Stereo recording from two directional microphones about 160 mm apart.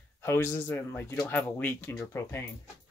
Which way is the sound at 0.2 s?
15° left (ahead or behind).